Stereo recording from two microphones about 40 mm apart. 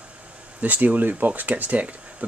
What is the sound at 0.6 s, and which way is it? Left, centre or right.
Speech, right.